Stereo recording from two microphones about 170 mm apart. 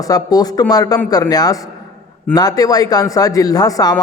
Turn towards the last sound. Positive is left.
turn(degrees=20)  # may be behind; listen again after turning